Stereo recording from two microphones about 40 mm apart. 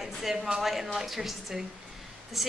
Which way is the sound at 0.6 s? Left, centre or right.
Centre.